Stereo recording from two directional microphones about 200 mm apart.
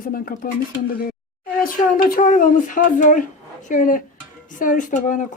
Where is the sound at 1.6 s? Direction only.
45° left (ahead or behind).